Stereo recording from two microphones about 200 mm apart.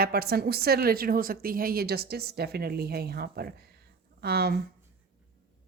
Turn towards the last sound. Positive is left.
turn(degrees=-50)  # may be behind; listen again after turning